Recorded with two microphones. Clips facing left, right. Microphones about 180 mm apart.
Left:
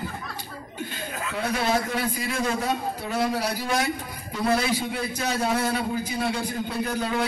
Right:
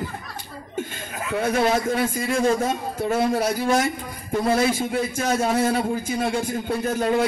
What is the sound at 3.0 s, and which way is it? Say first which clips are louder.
A man's voice: right 9 dB; 50° right (ahead or behind).